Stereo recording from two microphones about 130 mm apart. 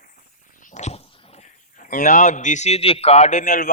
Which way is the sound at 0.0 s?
90° left.